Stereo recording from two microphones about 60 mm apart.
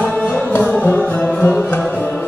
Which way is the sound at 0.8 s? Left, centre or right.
Centre.